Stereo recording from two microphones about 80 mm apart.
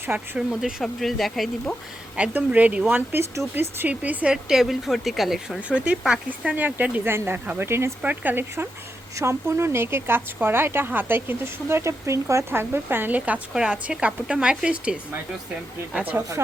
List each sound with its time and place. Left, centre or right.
0.1 s speech: right
0.5 s speech: centre
2.1 s speech: centre
5.5 s speech: centre
7.7 s speech: right
8.0 s speech: centre
9.1 s speech: right; by 14.9 s centre
16.1 s speech: right